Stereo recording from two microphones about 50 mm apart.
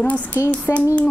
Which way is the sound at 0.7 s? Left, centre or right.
Left.